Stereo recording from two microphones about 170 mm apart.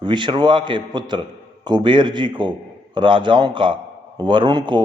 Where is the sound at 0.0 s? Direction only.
25° right (ahead or behind).